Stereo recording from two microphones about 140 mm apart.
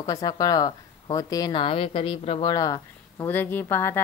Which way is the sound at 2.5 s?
25° left (ahead or behind).